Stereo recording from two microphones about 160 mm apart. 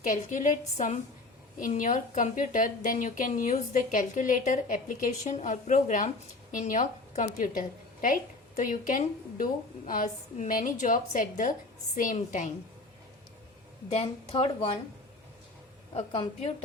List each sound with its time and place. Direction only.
0.0 s a woman's voice: 55° left (ahead or behind)
13.9 s a woman's voice: 35° left (ahead or behind)